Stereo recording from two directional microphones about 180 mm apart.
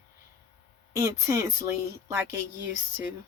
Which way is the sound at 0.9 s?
15° right (ahead or behind).